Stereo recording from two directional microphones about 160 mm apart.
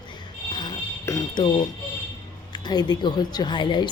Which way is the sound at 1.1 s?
25° left (ahead or behind).